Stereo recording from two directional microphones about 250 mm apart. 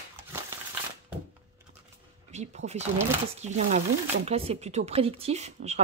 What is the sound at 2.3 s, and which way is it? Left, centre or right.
A woman's voice, right.